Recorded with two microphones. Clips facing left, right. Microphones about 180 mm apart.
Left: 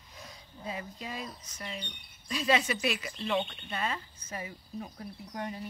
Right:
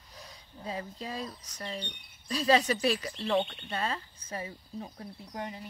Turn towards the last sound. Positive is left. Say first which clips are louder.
# left 1 dB
turn(degrees=-25)  # may be behind; listen again after turning